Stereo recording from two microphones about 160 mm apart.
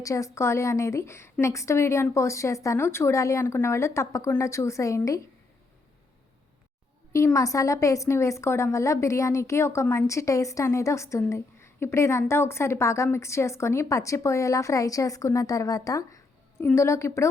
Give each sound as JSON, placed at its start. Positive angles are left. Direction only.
{"t": 0.0, "sound": "a woman's voice", "side_deg": 20}
{"t": 7.1, "sound": "a woman's voice", "side_deg": 20}